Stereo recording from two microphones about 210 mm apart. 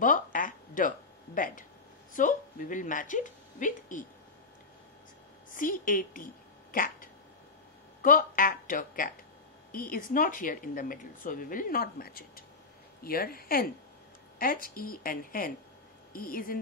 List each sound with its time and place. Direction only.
0.0 s a sound: 40° left (ahead or behind)
2.1 s speech: 40° left (ahead or behind)
5.5 s a woman's voice: 40° left (ahead or behind)